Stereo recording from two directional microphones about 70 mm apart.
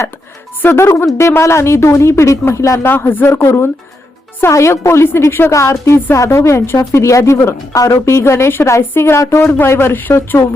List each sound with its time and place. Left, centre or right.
0.6 s speech: left
5.5 s a woman's voice: left
9.4 s speech: left